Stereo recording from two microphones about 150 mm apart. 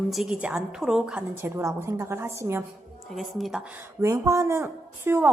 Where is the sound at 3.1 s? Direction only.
Centre (ahead or behind).